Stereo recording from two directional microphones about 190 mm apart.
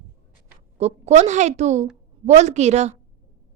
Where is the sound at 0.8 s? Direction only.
35° right (ahead or behind).